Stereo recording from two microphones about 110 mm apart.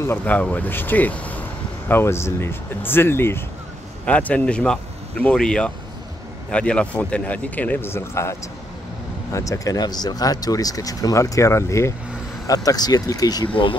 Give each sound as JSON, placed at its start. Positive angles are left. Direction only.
{"t": 0.0, "sound": "a man's voice", "side_deg": 15}
{"t": 13.5, "sound": "speech", "side_deg": 50}